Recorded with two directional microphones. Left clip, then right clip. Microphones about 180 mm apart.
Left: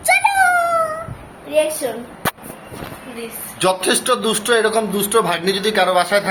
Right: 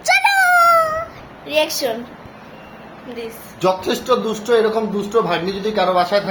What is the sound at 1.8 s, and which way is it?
Speech, 50° right (ahead or behind).